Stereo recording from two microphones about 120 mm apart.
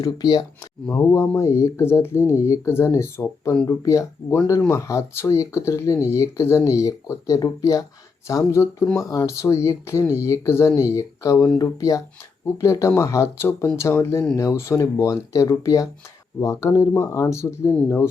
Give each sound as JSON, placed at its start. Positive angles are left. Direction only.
{"t": 0.0, "sound": "speech", "side_deg": 35}
{"t": 0.9, "sound": "speech", "side_deg": 20}